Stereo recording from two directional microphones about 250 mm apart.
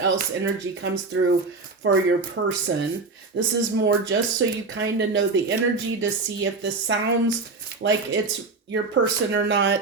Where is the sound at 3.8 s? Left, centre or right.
Right.